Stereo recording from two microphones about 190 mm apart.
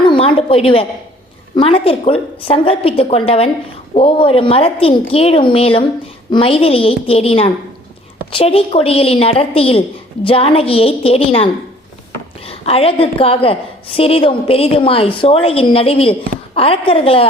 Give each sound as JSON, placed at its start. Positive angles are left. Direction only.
{"t": 0.0, "sound": "a sound", "side_deg": 25}
{"t": 1.5, "sound": "a woman's voice", "side_deg": 30}
{"t": 12.5, "sound": "a woman's voice", "side_deg": 30}